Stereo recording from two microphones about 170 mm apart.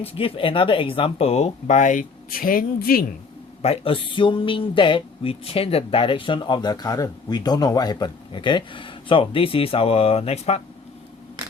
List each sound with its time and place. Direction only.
0.0 s speech: 35° left (ahead or behind); by 3.1 s 60° left (ahead or behind)
3.6 s speech: 35° left (ahead or behind)